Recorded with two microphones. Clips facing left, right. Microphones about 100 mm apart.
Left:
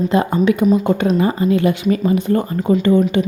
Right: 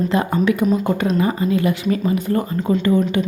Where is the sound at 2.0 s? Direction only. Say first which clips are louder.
Left 3 dB; 25° left (ahead or behind).